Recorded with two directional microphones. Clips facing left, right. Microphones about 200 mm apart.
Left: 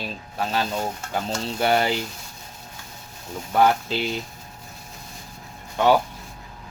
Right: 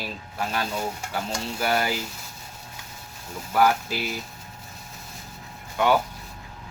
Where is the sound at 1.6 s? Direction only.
25° left (ahead or behind).